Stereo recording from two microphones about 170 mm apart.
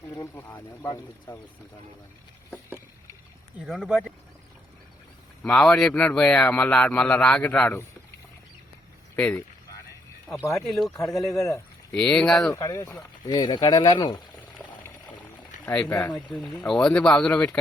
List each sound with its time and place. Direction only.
0.0 s a man's voice: 20° left (ahead or behind)
3.6 s speech: 5° right (ahead or behind)
5.4 s a man's voice: 5° left (ahead or behind)
9.1 s speech: 10° left (ahead or behind)
10.7 s speech: centre (ahead or behind)
12.5 s speech: 15° left (ahead or behind)
15.6 s a man's voice: 10° left (ahead or behind)